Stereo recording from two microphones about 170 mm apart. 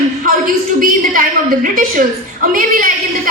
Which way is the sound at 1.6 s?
55° right (ahead or behind).